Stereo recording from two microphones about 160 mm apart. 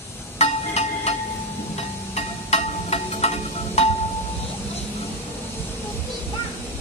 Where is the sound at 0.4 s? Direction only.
40° left (ahead or behind).